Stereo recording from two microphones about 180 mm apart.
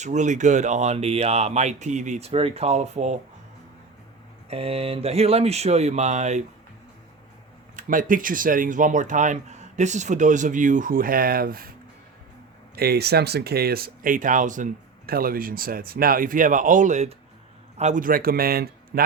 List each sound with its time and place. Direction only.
0.0 s speech: 40° right (ahead or behind)
4.4 s speech: 35° right (ahead or behind)
7.8 s speech: 50° right (ahead or behind)
12.7 s a man's voice: 60° right (ahead or behind)